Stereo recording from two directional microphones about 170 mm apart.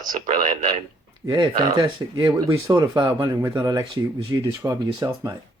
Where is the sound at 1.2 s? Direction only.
25° right (ahead or behind).